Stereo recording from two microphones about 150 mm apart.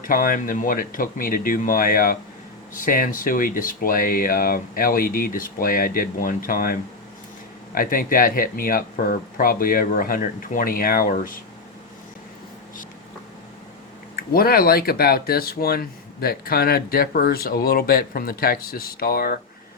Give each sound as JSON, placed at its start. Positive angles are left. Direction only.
{"t": 0.0, "sound": "speech", "side_deg": 65}
{"t": 7.8, "sound": "speech", "side_deg": 70}
{"t": 14.2, "sound": "speech", "side_deg": 85}